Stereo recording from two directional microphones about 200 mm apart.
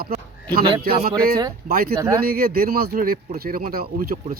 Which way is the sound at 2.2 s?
50° right (ahead or behind).